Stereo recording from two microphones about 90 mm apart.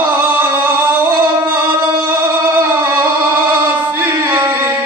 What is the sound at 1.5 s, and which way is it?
Singing, 20° right (ahead or behind).